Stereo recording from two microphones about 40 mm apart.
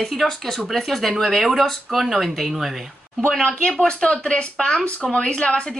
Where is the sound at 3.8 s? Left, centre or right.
Left.